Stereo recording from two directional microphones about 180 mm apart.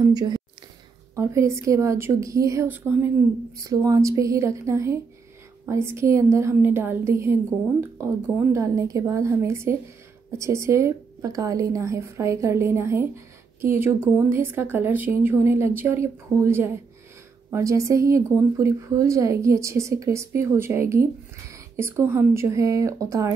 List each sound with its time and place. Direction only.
0.0 s a woman's voice: 20° right (ahead or behind)
8.4 s a woman's voice: 15° right (ahead or behind)